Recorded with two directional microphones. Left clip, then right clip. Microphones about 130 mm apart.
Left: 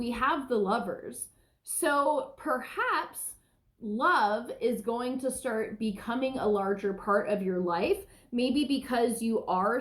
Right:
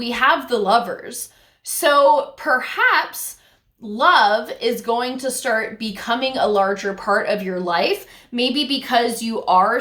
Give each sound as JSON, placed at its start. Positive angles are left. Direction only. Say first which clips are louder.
{"t": 0.0, "sound": "speech", "louder": "right 12 dB", "side_deg": -25}